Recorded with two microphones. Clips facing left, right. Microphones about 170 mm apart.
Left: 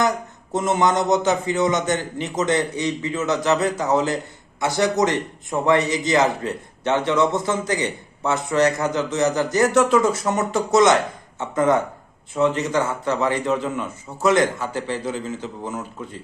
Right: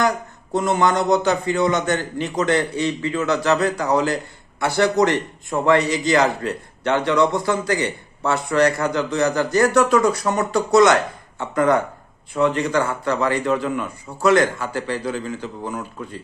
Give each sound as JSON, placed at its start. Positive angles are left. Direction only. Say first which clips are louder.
{"t": 0.5, "sound": "a man's voice", "louder": "right 1 dB", "side_deg": 20}